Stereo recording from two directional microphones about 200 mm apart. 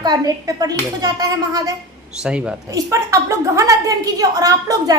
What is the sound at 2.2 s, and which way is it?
Speech, 5° right (ahead or behind).